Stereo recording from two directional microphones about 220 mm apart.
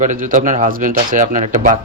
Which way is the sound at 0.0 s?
35° right (ahead or behind).